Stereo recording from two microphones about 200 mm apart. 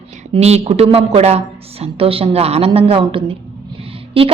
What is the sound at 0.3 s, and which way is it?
A woman's voice, 30° right (ahead or behind).